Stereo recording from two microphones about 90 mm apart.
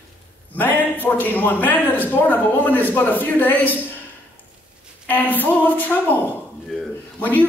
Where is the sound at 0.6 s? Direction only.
20° left (ahead or behind).